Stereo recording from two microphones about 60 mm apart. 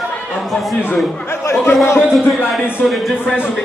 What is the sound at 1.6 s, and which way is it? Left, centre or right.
Speech, left.